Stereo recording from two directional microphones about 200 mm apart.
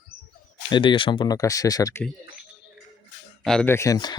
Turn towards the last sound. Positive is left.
turn(degrees=20)  # may be behind; listen again after turning